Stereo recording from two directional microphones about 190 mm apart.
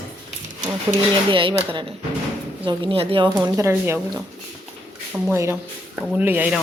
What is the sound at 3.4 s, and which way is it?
A woman's voice, 15° right (ahead or behind).